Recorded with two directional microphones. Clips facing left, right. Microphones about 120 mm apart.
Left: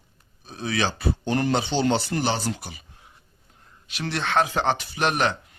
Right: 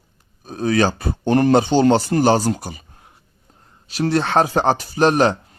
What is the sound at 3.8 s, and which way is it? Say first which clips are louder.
Speech: right 9 dB; 40° right (ahead or behind).